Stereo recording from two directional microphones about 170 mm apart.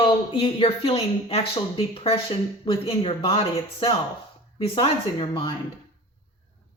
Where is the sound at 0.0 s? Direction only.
30° left (ahead or behind).